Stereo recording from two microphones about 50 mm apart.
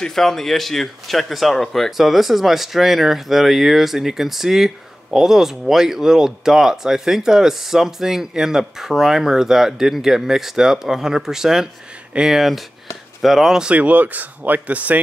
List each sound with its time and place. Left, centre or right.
0.0 s speech: centre
13.7 s speech: right